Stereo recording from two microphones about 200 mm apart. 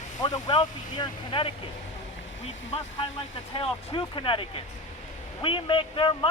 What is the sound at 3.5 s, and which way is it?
A man's voice, 25° left (ahead or behind).